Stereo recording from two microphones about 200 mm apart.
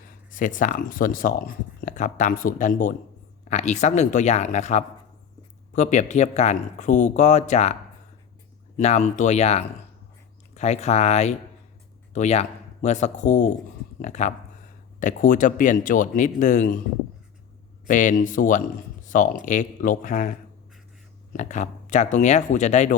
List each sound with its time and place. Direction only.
0.3 s speech: 40° left (ahead or behind)
17.8 s speech: 40° left (ahead or behind)
21.3 s speech: 35° left (ahead or behind)